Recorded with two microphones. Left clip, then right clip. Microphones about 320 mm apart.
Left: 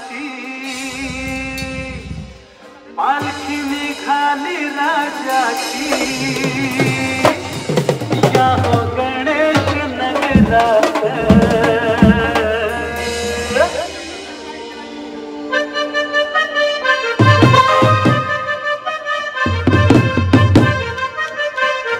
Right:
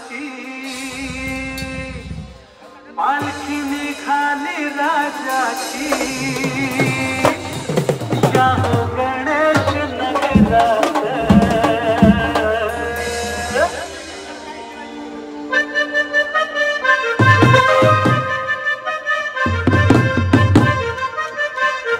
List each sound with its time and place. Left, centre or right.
3.0 s music: centre
15.5 s music: centre